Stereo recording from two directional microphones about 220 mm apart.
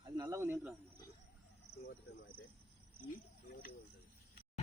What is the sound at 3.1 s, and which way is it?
Speech, 40° left (ahead or behind).